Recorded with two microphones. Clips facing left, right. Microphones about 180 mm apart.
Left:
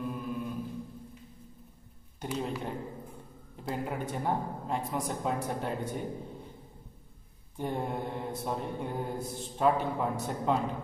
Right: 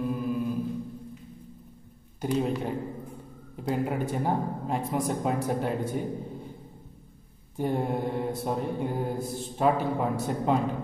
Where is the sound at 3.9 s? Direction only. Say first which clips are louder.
Right 4 dB; 5° right (ahead or behind).